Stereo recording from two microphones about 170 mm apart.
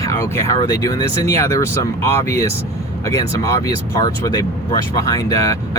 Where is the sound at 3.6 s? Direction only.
20° left (ahead or behind).